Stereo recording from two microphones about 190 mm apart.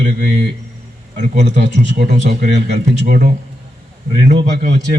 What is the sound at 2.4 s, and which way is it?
Speech, 50° right (ahead or behind).